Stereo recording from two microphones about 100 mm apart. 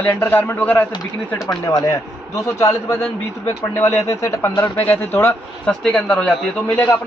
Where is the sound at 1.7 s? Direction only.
35° left (ahead or behind).